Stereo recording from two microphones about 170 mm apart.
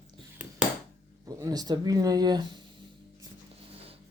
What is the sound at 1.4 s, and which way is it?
Speech, 20° right (ahead or behind).